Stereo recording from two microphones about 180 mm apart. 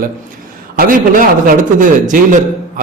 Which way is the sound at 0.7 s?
50° right (ahead or behind).